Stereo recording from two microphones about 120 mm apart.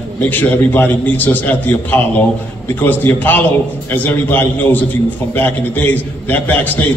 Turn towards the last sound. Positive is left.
turn(degrees=15)  # may be behind; listen again after turning